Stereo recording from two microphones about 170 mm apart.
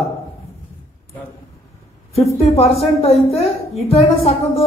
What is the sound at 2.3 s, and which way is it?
Speech, 35° left (ahead or behind).